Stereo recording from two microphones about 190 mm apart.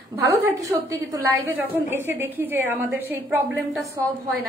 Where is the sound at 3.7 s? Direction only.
Centre (ahead or behind).